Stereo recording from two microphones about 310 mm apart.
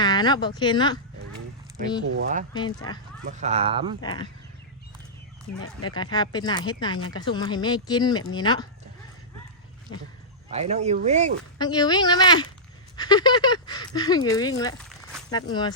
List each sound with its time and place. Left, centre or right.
0.0 s speech: centre
2.0 s speech: right
2.5 s speech: centre
3.2 s speech: right
4.0 s speech: centre
5.5 s speech: left
5.9 s speech: centre
10.5 s speech: right
11.6 s speech: centre